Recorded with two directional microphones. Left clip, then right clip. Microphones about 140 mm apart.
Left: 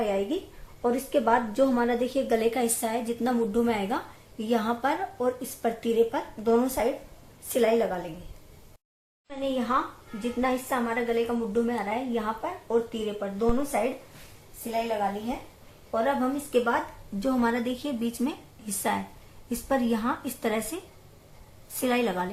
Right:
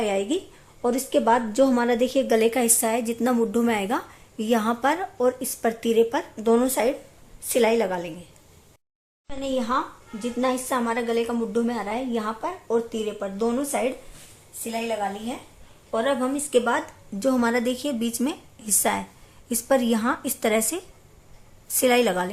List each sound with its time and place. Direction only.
0.0 s a woman's voice: 60° right (ahead or behind)
0.8 s a woman's voice: 50° right (ahead or behind)
9.4 s a woman's voice: 45° right (ahead or behind)
14.6 s a woman's voice: 60° right (ahead or behind)
15.9 s a woman's voice: 55° right (ahead or behind)